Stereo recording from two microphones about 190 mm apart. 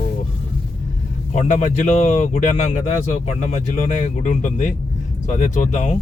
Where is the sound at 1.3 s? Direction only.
40° left (ahead or behind).